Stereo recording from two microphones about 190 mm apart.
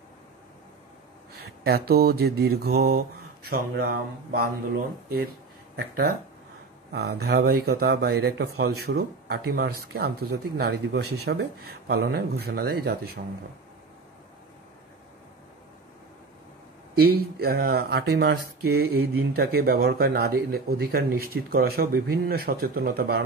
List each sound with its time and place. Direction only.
1.3 s mantra: 55° right (ahead or behind)
3.4 s speech: 55° right (ahead or behind)
5.8 s speech: 55° right (ahead or behind)
17.0 s speech: 55° right (ahead or behind)